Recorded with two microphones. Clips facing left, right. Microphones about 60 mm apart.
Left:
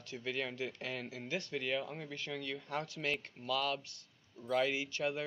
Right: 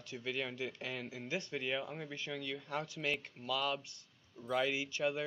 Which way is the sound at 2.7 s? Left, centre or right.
Centre.